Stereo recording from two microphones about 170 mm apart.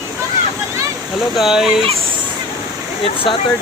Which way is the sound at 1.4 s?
Centre (ahead or behind).